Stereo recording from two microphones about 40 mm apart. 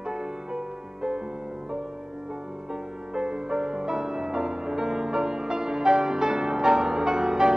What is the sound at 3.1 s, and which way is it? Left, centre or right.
Music, centre.